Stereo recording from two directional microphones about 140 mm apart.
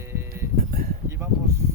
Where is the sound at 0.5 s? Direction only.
90° right.